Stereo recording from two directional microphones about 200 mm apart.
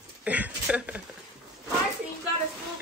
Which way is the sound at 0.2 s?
5° right (ahead or behind).